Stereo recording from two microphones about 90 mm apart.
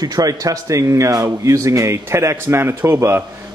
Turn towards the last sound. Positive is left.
turn(degrees=-30)  # may be behind; listen again after turning